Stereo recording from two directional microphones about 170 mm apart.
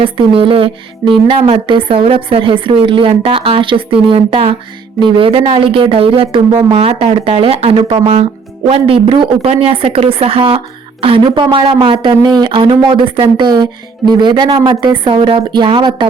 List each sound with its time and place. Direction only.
0.0 s a woman's voice: 30° right (ahead or behind)